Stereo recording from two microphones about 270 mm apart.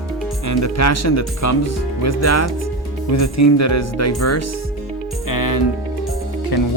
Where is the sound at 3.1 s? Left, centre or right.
Left.